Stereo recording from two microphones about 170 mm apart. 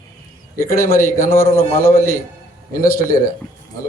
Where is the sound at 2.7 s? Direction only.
55° left (ahead or behind).